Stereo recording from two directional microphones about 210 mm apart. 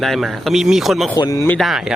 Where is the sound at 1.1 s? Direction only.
15° left (ahead or behind); by 1.9 s centre (ahead or behind).